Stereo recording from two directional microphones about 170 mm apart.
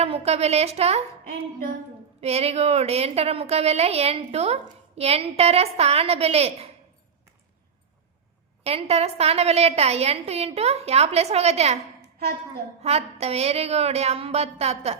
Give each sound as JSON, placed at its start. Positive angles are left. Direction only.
{"t": 0.0, "sound": "a woman's voice", "side_deg": -35}
{"t": 2.2, "sound": "a woman's voice", "side_deg": -40}
{"t": 8.6, "sound": "a woman's voice", "side_deg": -35}
{"t": 12.8, "sound": "a woman's voice", "side_deg": -40}